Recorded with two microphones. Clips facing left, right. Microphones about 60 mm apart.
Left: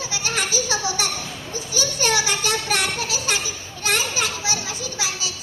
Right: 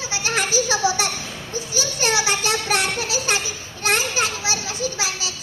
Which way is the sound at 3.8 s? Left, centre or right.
Right.